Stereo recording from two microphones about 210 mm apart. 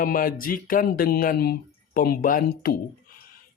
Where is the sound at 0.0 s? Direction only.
45° left (ahead or behind).